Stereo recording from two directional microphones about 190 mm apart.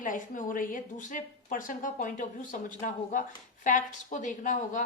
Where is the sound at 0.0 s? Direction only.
45° left (ahead or behind).